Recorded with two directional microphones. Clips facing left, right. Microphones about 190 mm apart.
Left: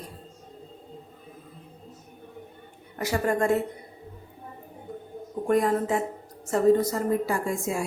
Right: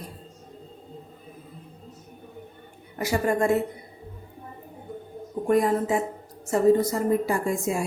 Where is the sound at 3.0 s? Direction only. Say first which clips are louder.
Right 1 dB; 10° right (ahead or behind).